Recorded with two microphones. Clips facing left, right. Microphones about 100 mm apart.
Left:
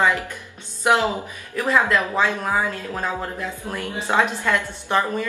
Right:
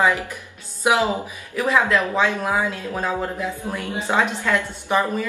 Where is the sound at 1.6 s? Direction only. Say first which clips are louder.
Right 1 dB; centre (ahead or behind).